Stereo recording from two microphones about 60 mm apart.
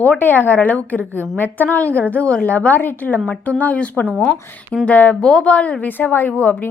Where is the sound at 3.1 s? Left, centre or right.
Centre.